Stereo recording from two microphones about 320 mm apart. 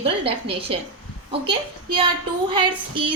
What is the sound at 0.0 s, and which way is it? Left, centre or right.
Speech, centre.